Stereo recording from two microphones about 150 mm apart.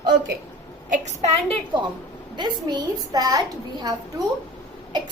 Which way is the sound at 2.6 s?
25° right (ahead or behind).